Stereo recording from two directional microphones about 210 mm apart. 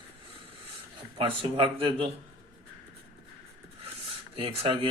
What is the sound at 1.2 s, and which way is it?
Speech, 25° right (ahead or behind).